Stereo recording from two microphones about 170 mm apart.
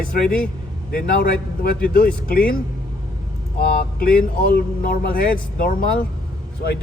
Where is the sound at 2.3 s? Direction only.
60° left (ahead or behind).